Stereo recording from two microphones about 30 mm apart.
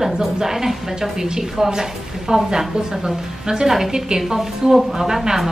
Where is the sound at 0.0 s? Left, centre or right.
Centre.